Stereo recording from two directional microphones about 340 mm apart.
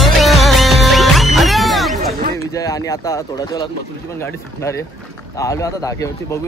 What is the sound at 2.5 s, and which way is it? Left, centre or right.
Speech, centre.